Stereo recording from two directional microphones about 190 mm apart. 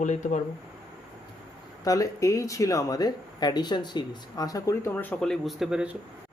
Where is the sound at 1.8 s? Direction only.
20° left (ahead or behind).